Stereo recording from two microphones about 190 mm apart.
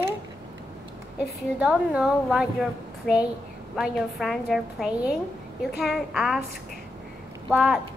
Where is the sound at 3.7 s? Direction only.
Centre (ahead or behind).